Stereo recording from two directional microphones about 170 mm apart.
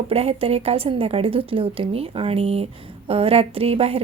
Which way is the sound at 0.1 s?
35° right (ahead or behind).